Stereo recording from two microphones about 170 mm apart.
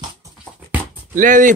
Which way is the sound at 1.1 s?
50° right (ahead or behind).